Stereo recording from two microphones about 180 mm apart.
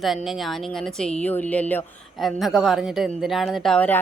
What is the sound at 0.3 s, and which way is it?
Speech, centre (ahead or behind).